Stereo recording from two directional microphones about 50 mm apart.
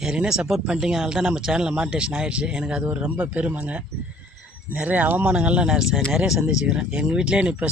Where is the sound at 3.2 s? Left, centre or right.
Right.